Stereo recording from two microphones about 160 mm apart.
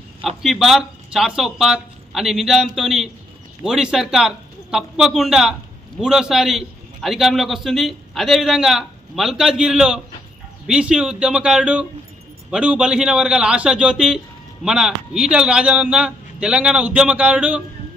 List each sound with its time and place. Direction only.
0.4 s a man's voice: centre (ahead or behind)